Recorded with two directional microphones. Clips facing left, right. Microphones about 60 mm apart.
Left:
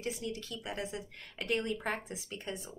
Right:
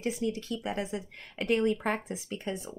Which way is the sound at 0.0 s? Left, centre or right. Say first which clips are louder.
Right 7 dB; right.